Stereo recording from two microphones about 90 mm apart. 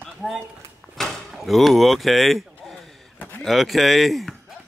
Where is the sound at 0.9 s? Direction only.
Centre (ahead or behind).